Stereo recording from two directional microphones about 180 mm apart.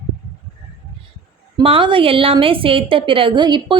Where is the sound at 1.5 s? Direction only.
30° right (ahead or behind).